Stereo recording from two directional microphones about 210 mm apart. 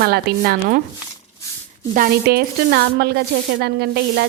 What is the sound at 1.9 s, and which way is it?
A woman's voice, 45° right (ahead or behind).